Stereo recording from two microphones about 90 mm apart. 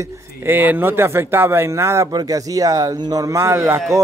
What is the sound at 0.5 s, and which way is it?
Speech, 20° right (ahead or behind).